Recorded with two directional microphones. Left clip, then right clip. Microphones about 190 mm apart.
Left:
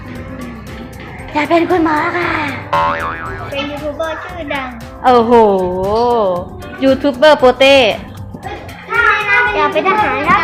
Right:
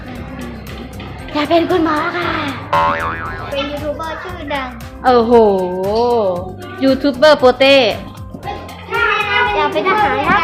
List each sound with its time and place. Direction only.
1.3 s speech: 10° right (ahead or behind)
4.0 s speech: 15° right (ahead or behind)
5.0 s speech: centre (ahead or behind)
8.9 s child singing: centre (ahead or behind)
9.9 s speech: centre (ahead or behind)